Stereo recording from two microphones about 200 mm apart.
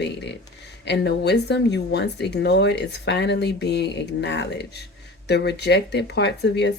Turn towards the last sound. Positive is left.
turn(degrees=60)  # may be behind; listen again after turning